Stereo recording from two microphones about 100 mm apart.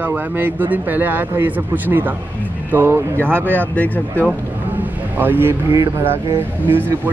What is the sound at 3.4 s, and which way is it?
Speech, 15° left (ahead or behind).